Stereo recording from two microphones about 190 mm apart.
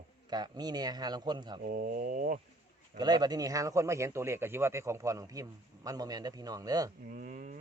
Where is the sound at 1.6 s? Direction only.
50° right (ahead or behind).